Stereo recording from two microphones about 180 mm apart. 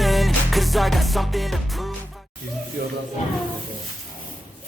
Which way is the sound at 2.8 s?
55° right (ahead or behind).